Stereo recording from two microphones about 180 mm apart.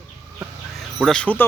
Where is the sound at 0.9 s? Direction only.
5° left (ahead or behind).